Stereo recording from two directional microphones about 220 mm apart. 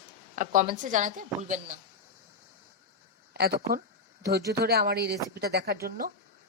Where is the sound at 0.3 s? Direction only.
35° right (ahead or behind).